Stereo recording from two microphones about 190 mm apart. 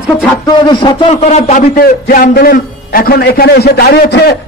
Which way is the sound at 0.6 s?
25° left (ahead or behind).